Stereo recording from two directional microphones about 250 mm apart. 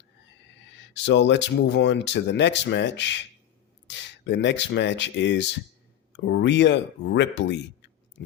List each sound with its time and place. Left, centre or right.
0.4 s speech: left